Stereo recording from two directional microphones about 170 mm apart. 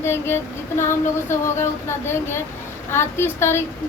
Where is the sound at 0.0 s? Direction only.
15° left (ahead or behind).